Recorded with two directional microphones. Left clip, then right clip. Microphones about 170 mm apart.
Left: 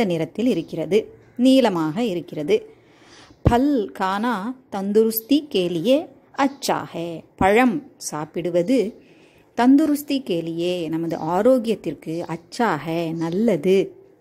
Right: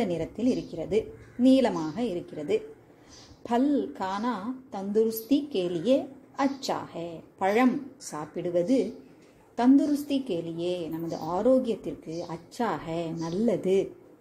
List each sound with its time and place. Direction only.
0.0 s a woman's voice: 40° left (ahead or behind)